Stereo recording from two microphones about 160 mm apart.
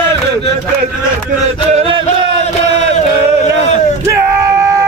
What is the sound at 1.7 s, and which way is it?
Music, 35° right (ahead or behind).